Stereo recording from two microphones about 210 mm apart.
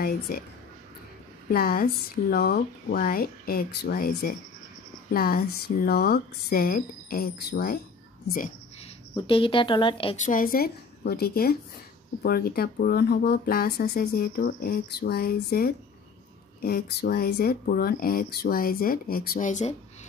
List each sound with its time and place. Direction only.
0.3 s speech: 45° left (ahead or behind)
1.5 s speech: 45° left (ahead or behind)
9.1 s a woman's voice: 25° left (ahead or behind)
10.2 s speech: 40° left (ahead or behind)